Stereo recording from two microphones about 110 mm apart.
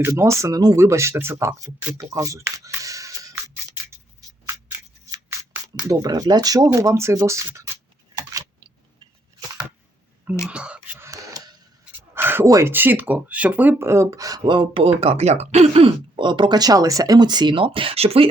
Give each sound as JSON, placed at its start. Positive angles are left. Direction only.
{"t": 0.0, "sound": "speech", "side_deg": -25}
{"t": 5.9, "sound": "speech", "side_deg": -35}
{"t": 8.1, "sound": "a sound", "side_deg": -35}
{"t": 10.4, "sound": "speech", "side_deg": -10}
{"t": 11.0, "sound": "a sound", "side_deg": -30}
{"t": 11.9, "sound": "a sound", "side_deg": -20}
{"t": 12.5, "sound": "speech", "side_deg": -30}
{"t": 12.7, "sound": "speech", "side_deg": -20}
{"t": 14.4, "sound": "speech", "side_deg": -45}
{"t": 16.2, "sound": "speech", "side_deg": -45}